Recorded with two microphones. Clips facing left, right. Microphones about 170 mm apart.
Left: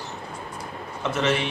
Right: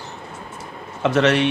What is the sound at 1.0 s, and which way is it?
Speech, 80° right.